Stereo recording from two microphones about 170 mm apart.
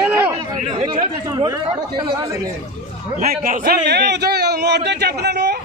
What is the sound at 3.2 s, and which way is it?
A man's voice, 50° right (ahead or behind).